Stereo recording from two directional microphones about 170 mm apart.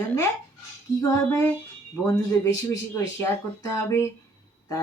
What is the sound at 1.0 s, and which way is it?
A woman's voice, 15° left (ahead or behind).